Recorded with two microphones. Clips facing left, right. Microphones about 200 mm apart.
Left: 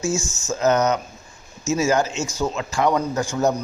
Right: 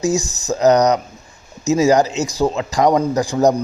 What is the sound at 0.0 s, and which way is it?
A man's voice, 35° right (ahead or behind).